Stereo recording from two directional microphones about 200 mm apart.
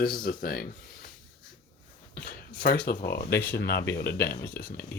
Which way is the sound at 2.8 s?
50° left (ahead or behind).